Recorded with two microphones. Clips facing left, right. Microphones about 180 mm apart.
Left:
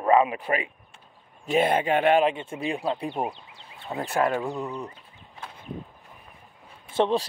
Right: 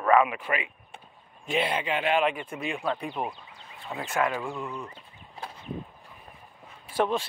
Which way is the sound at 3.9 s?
35° left (ahead or behind).